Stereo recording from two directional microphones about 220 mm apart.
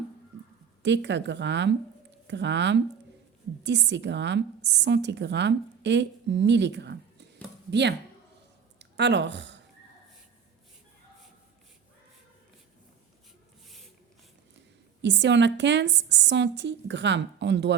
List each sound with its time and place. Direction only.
0.8 s a woman's voice: 50° right (ahead or behind)
15.0 s a woman's voice: 55° right (ahead or behind)